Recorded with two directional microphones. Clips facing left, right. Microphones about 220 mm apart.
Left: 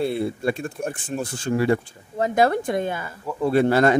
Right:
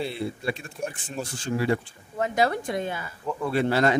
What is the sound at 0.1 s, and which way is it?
A woman's voice, 50° left (ahead or behind).